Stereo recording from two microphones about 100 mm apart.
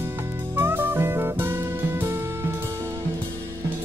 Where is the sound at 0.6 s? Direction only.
20° right (ahead or behind).